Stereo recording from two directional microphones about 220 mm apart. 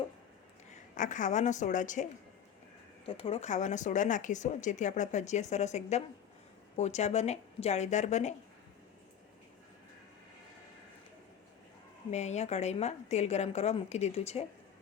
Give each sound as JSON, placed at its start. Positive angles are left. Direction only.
{"t": 0.9, "sound": "speech", "side_deg": 35}
{"t": 3.1, "sound": "speech", "side_deg": 25}
{"t": 12.1, "sound": "speech", "side_deg": 30}